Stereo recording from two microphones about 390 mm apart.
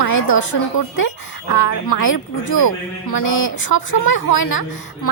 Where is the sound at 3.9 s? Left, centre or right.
Left.